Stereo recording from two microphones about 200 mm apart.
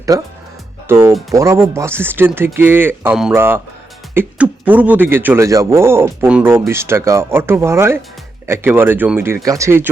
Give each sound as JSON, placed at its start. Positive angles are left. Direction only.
{"t": 0.1, "sound": "speech", "side_deg": -15}